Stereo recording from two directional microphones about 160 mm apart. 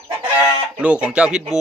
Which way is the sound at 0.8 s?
5° right (ahead or behind).